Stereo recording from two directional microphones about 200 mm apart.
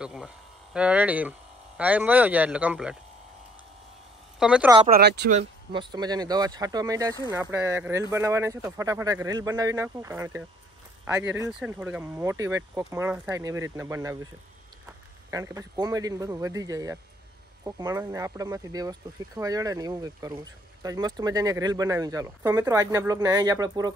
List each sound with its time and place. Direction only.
0.0 s speech: 5° right (ahead or behind)
4.4 s speech: 5° right (ahead or behind)
4.8 s speech: 50° right (ahead or behind)
5.7 s a man's voice: 25° right (ahead or behind)